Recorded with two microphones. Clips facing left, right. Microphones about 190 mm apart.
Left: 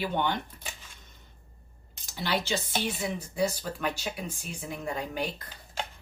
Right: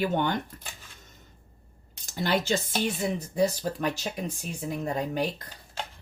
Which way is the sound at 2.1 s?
50° right (ahead or behind).